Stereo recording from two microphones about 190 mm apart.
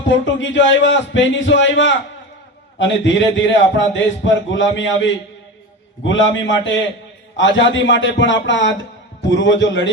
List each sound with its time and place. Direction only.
0.1 s a man's voice: 70° left (ahead or behind)